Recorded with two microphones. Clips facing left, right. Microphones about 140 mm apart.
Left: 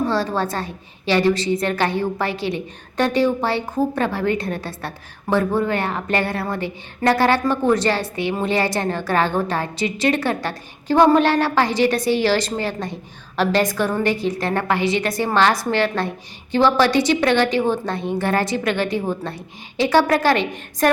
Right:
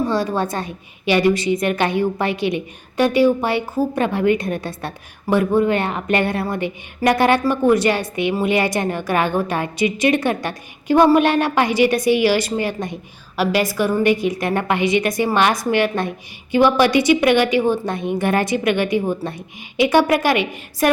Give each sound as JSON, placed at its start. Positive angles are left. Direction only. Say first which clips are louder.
{"t": 0.1, "sound": "a woman's voice", "louder": "right 1 dB", "side_deg": -15}